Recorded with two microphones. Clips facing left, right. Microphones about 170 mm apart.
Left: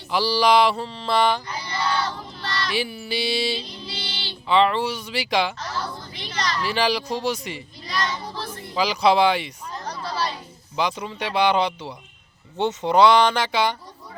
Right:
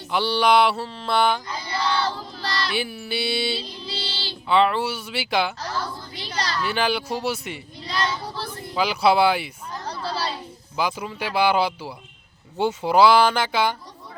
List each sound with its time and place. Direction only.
0.1 s mantra: centre (ahead or behind)
2.0 s child singing: 35° right (ahead or behind)
2.7 s mantra: centre (ahead or behind)
3.8 s child singing: 30° right (ahead or behind)
4.4 s mantra: centre (ahead or behind)
6.1 s a sound: 35° right (ahead or behind)
6.6 s mantra: centre (ahead or behind)
7.9 s child singing: 30° right (ahead or behind)
8.7 s mantra: 5° right (ahead or behind)
9.8 s a sound: 30° right (ahead or behind)
10.8 s mantra: 5° right (ahead or behind)